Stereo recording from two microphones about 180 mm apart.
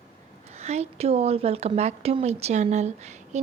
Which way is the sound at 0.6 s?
40° right (ahead or behind).